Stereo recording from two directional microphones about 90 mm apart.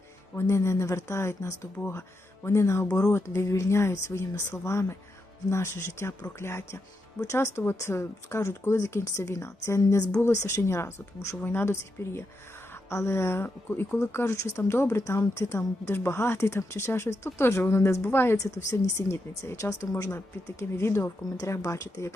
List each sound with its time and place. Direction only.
0.3 s speech: 30° left (ahead or behind)
18.3 s speech: 35° left (ahead or behind)